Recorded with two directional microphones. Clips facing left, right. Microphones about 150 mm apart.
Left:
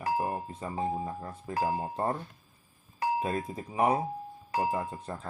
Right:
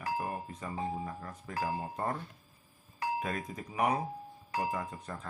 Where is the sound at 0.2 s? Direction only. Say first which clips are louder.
Left 5 dB; 30° left (ahead or behind).